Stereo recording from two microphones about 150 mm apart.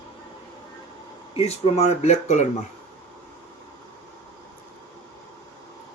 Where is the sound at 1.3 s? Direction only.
40° left (ahead or behind).